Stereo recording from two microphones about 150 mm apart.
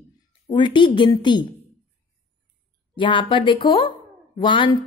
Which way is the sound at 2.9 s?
35° left (ahead or behind).